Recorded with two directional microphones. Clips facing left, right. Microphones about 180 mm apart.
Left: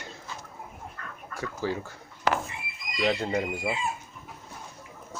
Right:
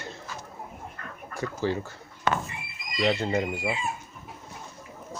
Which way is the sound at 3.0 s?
5° right (ahead or behind).